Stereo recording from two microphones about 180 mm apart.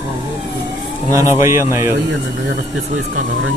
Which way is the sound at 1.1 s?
15° right (ahead or behind).